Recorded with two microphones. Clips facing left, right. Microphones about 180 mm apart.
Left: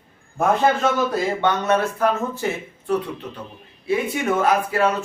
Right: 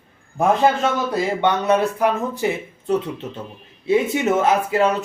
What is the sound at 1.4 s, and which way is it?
Speech, 15° right (ahead or behind).